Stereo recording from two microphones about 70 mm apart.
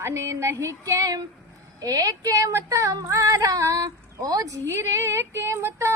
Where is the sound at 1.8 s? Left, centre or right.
Right.